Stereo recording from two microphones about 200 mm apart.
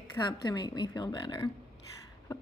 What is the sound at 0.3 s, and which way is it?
A woman's voice, 20° left (ahead or behind).